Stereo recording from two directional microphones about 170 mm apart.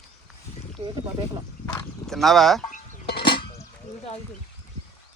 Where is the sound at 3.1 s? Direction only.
70° left (ahead or behind).